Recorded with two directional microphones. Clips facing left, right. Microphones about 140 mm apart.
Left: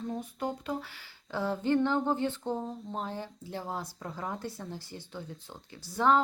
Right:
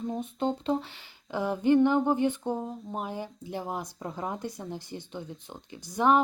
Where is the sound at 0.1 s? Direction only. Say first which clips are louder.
Right 6 dB; 25° right (ahead or behind).